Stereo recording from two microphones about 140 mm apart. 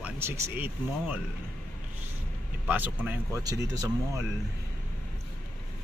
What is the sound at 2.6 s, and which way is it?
Speech, 10° right (ahead or behind).